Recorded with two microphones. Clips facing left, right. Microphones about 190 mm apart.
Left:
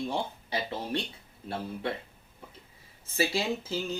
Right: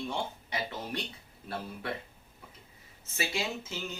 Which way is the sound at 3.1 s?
35° left (ahead or behind).